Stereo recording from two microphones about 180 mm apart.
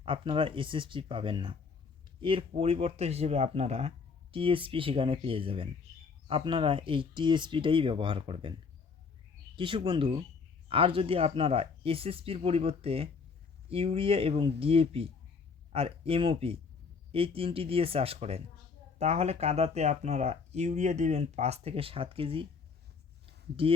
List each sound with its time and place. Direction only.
0.0 s speech: 30° right (ahead or behind)
9.6 s speech: 30° right (ahead or behind)
23.2 s a sound: 30° right (ahead or behind)